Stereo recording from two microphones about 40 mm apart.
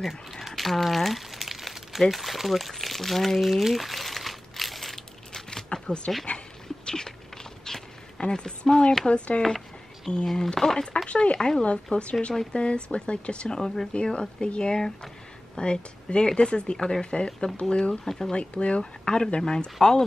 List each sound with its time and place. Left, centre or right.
0.0 s speech: centre
3.4 s crumpling: centre
6.9 s a sound: centre
8.2 s speech: centre
10.0 s speech: centre
18.0 s speech: centre
18.3 s speech: left